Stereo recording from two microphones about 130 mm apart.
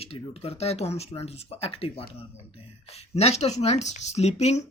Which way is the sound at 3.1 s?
55° left (ahead or behind).